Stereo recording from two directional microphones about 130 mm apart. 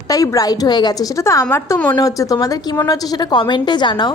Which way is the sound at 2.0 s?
30° left (ahead or behind).